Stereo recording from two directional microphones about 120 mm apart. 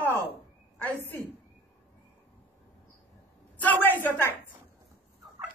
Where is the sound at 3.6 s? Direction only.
15° left (ahead or behind).